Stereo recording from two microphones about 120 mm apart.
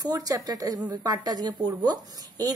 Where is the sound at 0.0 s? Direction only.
30° right (ahead or behind).